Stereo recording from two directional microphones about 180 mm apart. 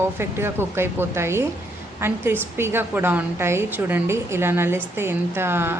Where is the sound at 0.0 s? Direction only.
15° right (ahead or behind).